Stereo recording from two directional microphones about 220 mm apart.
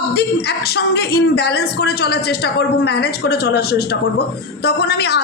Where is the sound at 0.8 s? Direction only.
45° left (ahead or behind).